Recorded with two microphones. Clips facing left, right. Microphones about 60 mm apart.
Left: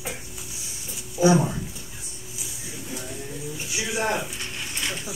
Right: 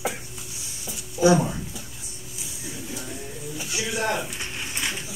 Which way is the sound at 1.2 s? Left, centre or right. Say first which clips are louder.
Right 1 dB; centre.